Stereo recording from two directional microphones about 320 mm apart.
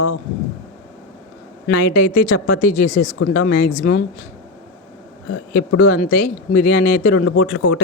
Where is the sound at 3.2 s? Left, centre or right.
Left.